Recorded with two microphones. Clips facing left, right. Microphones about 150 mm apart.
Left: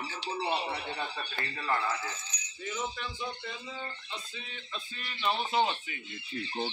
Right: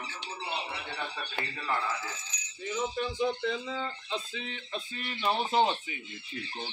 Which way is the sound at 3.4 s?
90° right.